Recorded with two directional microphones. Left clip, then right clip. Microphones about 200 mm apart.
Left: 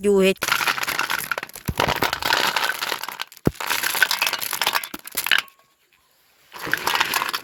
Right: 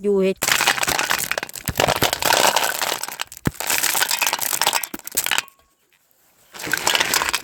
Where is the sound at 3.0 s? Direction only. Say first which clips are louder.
Left 1 dB; 45° right (ahead or behind).